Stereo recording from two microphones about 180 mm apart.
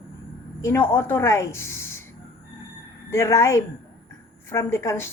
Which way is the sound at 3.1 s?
15° left (ahead or behind).